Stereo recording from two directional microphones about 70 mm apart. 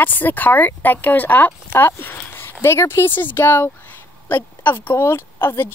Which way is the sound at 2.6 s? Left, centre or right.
Left.